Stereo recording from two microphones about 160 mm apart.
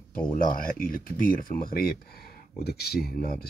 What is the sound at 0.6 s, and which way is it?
Speech, 65° left (ahead or behind).